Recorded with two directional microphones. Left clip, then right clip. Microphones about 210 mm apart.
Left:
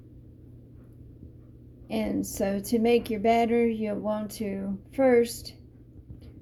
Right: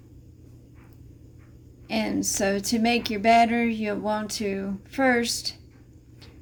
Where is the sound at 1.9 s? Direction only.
20° right (ahead or behind).